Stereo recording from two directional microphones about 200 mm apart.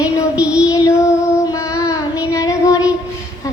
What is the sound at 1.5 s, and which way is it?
Child singing, 15° left (ahead or behind).